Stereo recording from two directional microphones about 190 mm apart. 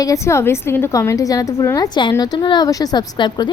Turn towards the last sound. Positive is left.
turn(degrees=25)  # may be behind; listen again after turning